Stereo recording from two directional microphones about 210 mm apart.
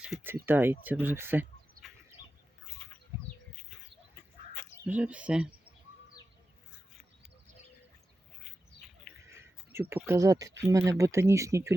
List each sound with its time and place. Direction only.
0.0 s speech: 5° right (ahead or behind)
1.8 s bird: 40° right (ahead or behind)
2.8 s bird: 5° left (ahead or behind)
4.5 s bird: 15° left (ahead or behind)
4.9 s speech: 5° right (ahead or behind)
9.3 s a sound: 10° right (ahead or behind)
9.9 s speech: 10° right (ahead or behind)